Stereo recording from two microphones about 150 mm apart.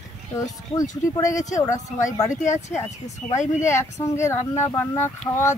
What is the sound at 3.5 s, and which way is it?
Speech, 20° left (ahead or behind).